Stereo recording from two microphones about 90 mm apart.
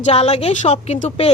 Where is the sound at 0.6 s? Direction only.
90° left.